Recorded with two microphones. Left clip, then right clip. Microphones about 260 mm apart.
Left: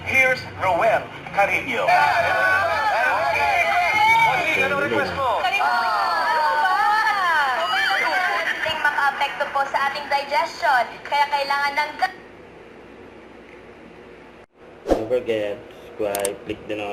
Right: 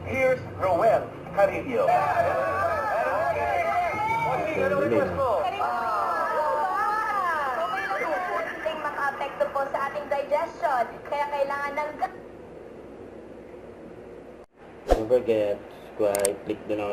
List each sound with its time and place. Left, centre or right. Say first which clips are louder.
0.0 s a sound: left 6 dB; centre
14.8 s speech: left 1 dB; centre
16.0 s mechanisms: even; centre